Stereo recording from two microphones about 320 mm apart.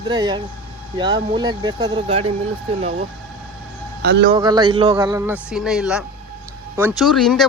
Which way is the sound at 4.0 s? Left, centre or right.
Right.